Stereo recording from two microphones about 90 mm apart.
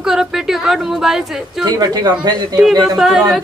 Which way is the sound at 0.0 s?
5° right (ahead or behind).